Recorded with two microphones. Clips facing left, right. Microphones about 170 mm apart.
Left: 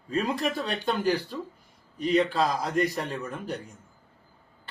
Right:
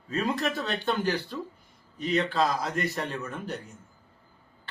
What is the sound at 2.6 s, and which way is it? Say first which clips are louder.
Speech: left 4 dB; 40° left (ahead or behind).